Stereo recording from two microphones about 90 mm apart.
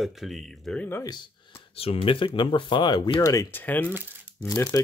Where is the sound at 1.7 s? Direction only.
90° left.